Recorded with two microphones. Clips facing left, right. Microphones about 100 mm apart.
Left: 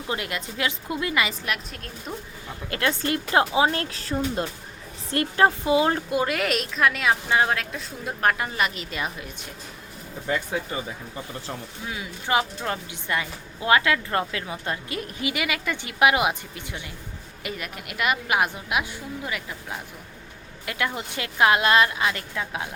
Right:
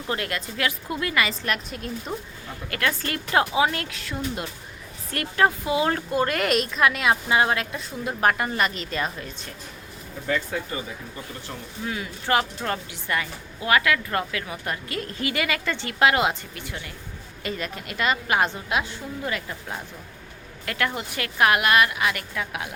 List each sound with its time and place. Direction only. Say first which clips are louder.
0.1 s a woman's voice: right 1 dB; 20° left (ahead or behind)
1.5 s a woman's voice: right 3 dB; centre (ahead or behind)
2.6 s a woman's voice: left 2 dB; 25° left (ahead or behind)
6.2 s a woman's voice: right 2 dB; centre (ahead or behind)
10.2 s a woman's voice: even; 20° left (ahead or behind)
11.9 s a woman's voice: right 1 dB; 15° left (ahead or behind)
17.4 s a woman's voice: right 3 dB; 5° left (ahead or behind)
20.7 s a woman's voice: right 1 dB; 15° left (ahead or behind)